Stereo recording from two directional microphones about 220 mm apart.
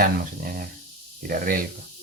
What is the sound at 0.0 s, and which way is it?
Speech, 40° right (ahead or behind).